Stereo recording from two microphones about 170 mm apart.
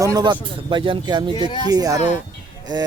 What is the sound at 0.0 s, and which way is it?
Speech, 25° right (ahead or behind).